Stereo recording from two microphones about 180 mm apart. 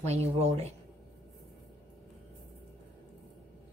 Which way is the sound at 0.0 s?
35° right (ahead or behind).